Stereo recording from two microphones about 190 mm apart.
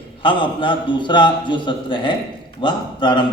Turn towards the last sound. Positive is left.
turn(degrees=25)  # may be behind; listen again after turning